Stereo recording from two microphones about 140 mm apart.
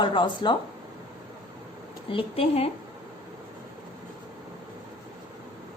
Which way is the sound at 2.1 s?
40° left (ahead or behind).